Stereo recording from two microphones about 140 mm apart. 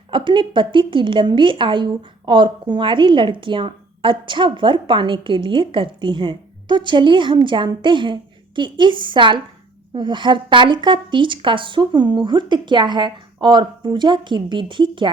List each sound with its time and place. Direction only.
0.1 s a woman's voice: 35° right (ahead or behind)